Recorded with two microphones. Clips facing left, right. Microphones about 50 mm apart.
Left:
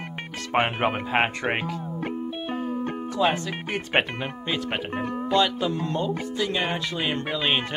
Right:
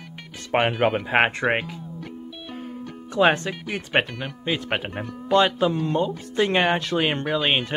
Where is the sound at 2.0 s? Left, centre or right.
Left.